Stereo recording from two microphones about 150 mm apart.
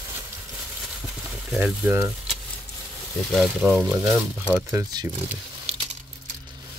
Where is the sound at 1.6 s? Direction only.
15° right (ahead or behind).